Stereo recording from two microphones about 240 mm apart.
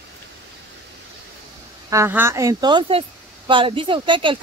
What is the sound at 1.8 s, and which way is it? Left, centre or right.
Speech, centre.